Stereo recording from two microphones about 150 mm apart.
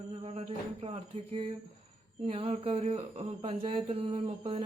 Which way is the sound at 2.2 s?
40° right (ahead or behind).